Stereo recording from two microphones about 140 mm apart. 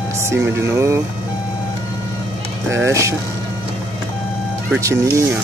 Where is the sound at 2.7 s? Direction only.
20° right (ahead or behind).